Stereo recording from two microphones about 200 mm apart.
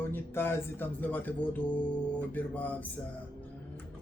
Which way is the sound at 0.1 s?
10° left (ahead or behind).